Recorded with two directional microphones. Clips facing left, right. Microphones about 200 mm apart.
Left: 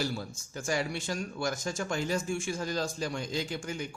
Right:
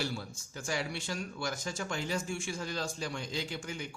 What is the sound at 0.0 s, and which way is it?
A man's voice, 45° left (ahead or behind).